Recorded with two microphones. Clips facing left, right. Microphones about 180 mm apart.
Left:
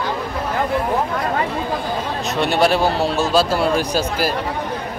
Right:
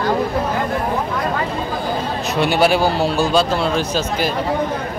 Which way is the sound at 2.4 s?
Centre (ahead or behind).